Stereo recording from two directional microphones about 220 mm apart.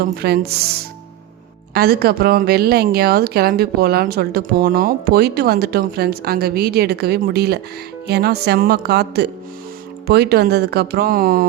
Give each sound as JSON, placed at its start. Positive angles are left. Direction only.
{"t": 0.0, "sound": "a woman's voice", "side_deg": -45}